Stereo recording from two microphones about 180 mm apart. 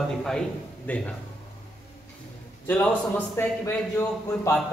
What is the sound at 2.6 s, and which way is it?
Speech, 10° left (ahead or behind).